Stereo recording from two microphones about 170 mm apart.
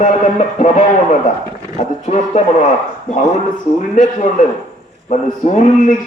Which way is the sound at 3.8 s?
45° left (ahead or behind).